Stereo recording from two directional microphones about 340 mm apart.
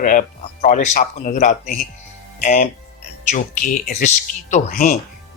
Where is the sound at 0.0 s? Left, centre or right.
Left.